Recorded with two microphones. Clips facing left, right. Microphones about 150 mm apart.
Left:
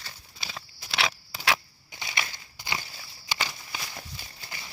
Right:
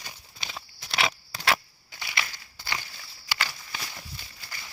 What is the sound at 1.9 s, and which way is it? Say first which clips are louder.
Crushing: even; 20° left (ahead or behind).